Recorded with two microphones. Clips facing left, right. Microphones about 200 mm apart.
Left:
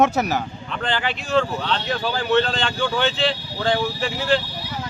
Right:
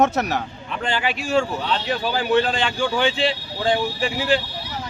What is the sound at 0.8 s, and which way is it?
Speech, 10° right (ahead or behind).